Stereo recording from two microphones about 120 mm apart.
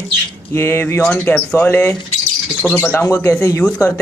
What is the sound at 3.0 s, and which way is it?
Speech, 25° left (ahead or behind).